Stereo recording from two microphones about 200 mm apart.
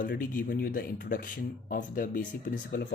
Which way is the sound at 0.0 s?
45° left (ahead or behind).